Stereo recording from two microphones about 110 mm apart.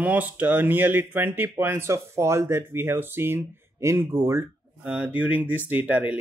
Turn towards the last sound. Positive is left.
turn(degrees=-15)  # may be behind; listen again after turning